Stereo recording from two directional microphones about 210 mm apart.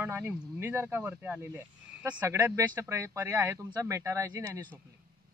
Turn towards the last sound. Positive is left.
turn(degrees=-15)  # may be behind; listen again after turning